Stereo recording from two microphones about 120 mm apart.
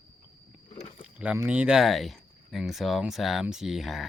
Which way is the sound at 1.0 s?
10° right (ahead or behind).